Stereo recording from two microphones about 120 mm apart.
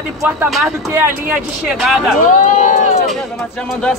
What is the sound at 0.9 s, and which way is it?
Speech, 20° right (ahead or behind).